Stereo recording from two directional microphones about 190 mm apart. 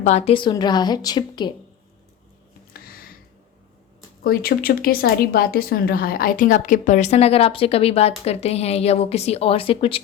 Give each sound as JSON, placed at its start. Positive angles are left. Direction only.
{"t": 0.0, "sound": "a woman's voice", "side_deg": 35}
{"t": 2.7, "sound": "a sound", "side_deg": 55}
{"t": 4.2, "sound": "a woman's voice", "side_deg": 50}